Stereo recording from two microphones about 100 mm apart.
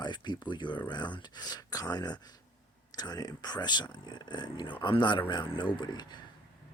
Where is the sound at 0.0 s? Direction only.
45° left (ahead or behind).